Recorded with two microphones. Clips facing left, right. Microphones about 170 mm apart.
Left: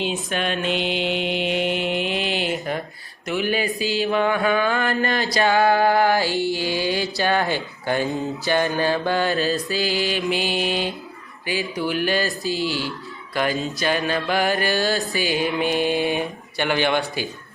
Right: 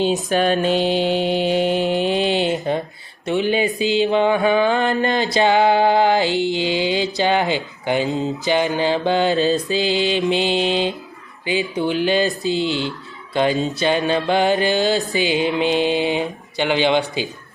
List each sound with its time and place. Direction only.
0.0 s mantra: 40° right (ahead or behind); by 17.2 s 20° right (ahead or behind)